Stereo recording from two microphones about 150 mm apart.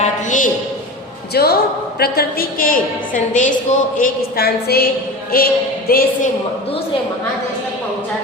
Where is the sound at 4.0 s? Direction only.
90° left.